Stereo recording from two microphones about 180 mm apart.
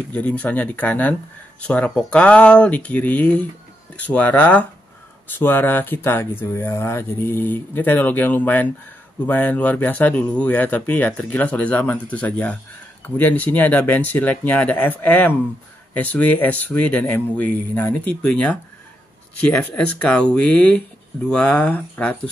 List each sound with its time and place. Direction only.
0.1 s speech: 10° left (ahead or behind)